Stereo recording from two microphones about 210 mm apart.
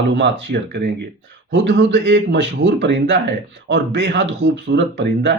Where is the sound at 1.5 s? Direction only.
55° right (ahead or behind).